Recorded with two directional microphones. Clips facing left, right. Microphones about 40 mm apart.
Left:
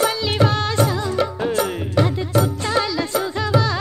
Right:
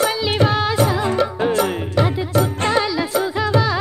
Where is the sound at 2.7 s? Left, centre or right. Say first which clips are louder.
Even; centre.